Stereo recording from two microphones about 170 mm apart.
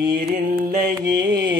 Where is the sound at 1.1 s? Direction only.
25° right (ahead or behind).